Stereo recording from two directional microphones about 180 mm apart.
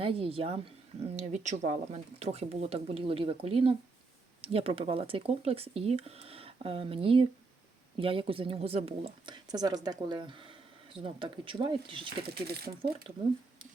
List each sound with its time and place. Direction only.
0.0 s speech: 30° right (ahead or behind)
12.2 s speech: 60° right (ahead or behind)